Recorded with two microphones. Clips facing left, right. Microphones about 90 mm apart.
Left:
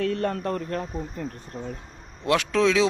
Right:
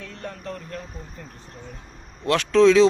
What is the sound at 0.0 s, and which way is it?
Speech, 60° left (ahead or behind).